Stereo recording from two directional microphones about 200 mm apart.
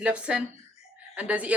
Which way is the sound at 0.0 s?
5° right (ahead or behind).